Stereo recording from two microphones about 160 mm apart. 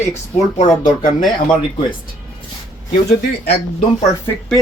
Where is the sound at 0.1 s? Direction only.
45° left (ahead or behind).